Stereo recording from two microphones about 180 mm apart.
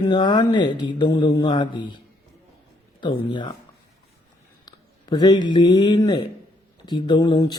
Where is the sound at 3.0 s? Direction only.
25° left (ahead or behind).